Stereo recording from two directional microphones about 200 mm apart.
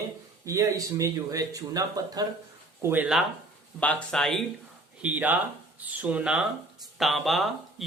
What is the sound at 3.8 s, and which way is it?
Speech, 5° left (ahead or behind).